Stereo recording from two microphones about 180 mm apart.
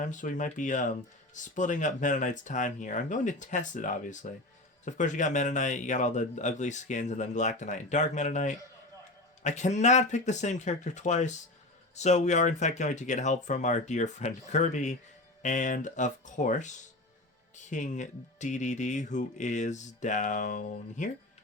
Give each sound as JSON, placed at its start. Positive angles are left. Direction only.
{"t": 0.0, "sound": "speech", "side_deg": 45}